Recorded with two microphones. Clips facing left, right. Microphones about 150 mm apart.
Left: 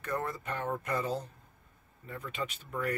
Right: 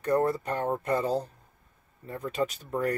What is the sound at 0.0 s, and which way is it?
Speech, 35° right (ahead or behind).